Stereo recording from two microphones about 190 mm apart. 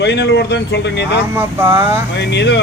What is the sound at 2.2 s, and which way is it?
Speech, 65° left (ahead or behind).